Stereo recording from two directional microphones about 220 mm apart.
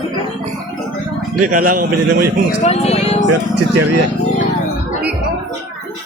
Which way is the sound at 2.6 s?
30° left (ahead or behind).